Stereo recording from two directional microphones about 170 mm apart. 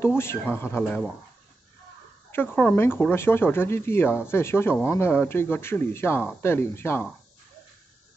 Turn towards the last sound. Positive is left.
turn(degrees=15)  # may be behind; listen again after turning